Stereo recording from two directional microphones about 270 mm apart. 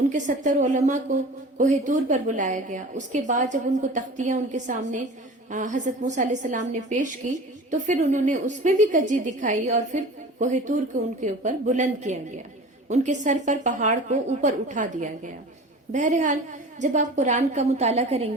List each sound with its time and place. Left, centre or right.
0.1 s a woman's voice: right